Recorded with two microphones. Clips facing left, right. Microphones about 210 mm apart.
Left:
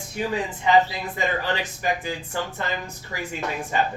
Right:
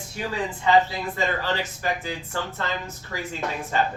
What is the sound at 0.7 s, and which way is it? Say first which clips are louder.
Speech: left 1 dB; 15° left (ahead or behind).